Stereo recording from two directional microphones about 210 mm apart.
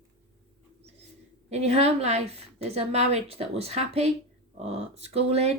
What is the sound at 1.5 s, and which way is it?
A woman's voice, 30° right (ahead or behind).